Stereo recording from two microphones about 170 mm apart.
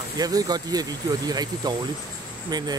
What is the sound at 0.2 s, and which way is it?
Speech, 20° right (ahead or behind).